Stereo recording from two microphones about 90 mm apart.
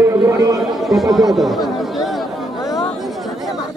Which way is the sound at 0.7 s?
Centre (ahead or behind).